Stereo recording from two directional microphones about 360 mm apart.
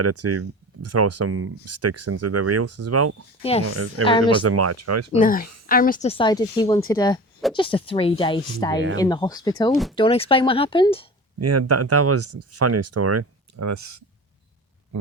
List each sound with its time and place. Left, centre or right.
0.0 s speech: right
5.1 s speech: left
11.3 s speech: right